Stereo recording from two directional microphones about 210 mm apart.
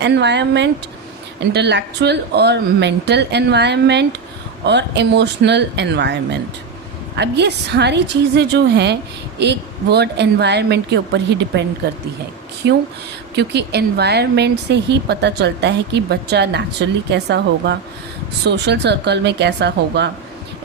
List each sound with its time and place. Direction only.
0.0 s speech: 55° right (ahead or behind)
7.2 s speech: 55° right (ahead or behind)